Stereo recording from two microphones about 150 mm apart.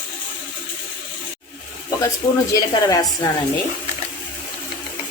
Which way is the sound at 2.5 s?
25° left (ahead or behind).